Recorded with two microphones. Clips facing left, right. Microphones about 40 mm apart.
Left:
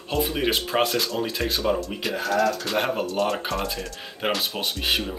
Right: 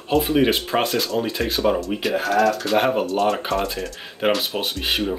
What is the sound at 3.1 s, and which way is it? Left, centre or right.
Speech, centre.